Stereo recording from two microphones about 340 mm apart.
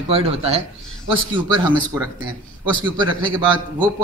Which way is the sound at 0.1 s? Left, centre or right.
Centre.